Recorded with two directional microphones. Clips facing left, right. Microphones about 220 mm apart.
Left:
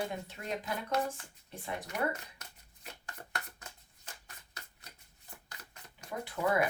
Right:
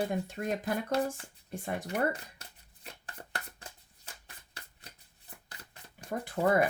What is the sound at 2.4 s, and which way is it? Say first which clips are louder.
Shuffling cards: right 1 dB; 30° right (ahead or behind).